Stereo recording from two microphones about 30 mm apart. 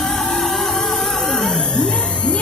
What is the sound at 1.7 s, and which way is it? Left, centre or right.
Music, left.